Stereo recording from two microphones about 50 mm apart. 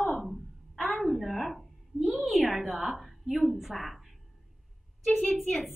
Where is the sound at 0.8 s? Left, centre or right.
Centre.